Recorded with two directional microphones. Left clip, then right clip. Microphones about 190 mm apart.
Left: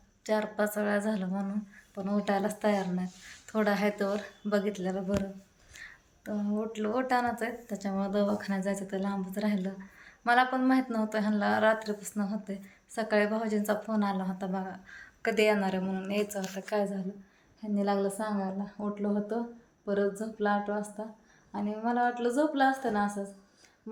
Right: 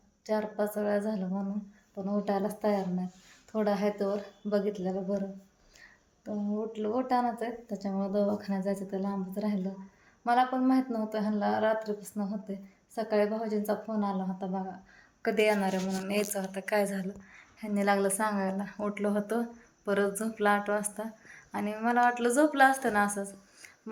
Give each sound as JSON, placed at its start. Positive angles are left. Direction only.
{"t": 0.3, "sound": "speech", "side_deg": -5}
{"t": 5.7, "sound": "a sound", "side_deg": -10}
{"t": 6.6, "sound": "speech", "side_deg": -10}